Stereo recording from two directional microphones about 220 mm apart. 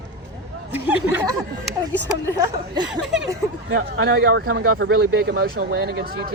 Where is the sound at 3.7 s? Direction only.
50° right (ahead or behind).